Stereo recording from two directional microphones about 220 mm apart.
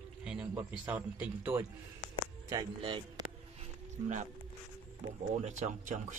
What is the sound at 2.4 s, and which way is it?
Speech, 20° right (ahead or behind).